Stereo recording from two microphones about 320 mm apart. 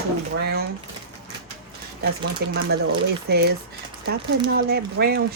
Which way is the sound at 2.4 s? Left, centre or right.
Right.